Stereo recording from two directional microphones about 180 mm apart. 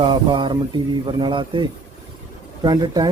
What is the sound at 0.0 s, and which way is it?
Speech, 25° right (ahead or behind).